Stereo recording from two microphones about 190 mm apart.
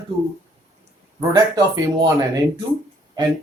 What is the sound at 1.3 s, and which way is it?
Speech, 20° right (ahead or behind).